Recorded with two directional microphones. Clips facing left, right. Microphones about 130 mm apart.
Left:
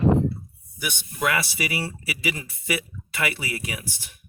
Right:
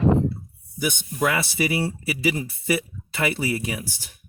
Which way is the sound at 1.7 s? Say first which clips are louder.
Right 5 dB; 30° right (ahead or behind).